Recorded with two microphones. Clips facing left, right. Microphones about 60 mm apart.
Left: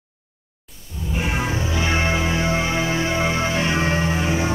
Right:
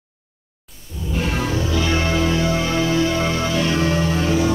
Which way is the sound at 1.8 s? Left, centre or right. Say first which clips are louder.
Right 1 dB; left.